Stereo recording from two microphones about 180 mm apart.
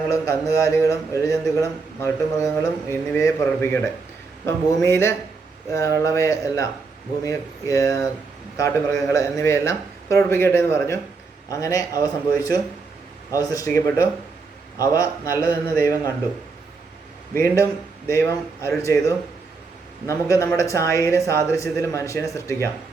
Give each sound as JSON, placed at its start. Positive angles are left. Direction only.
{"t": 0.1, "sound": "speech", "side_deg": 15}
{"t": 18.1, "sound": "speech", "side_deg": 15}